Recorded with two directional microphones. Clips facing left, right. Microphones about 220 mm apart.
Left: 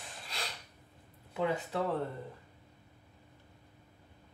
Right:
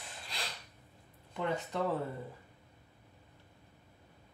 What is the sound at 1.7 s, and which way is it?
Speech, 5° left (ahead or behind).